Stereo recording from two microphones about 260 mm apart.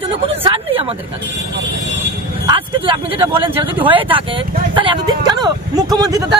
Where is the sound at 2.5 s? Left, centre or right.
Right.